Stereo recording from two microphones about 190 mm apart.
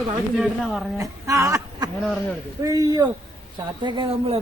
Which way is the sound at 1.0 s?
15° right (ahead or behind).